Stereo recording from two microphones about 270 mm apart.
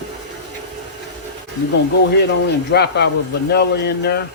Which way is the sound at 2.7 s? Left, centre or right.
Left.